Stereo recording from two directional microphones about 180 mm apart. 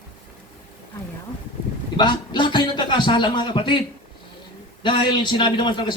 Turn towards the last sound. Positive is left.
turn(degrees=25)  # may be behind; listen again after turning